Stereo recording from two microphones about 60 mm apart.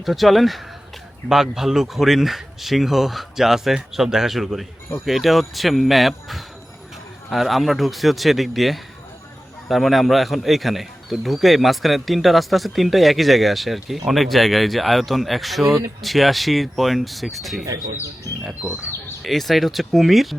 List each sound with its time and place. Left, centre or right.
0.0 s speech: centre
19.2 s speech: centre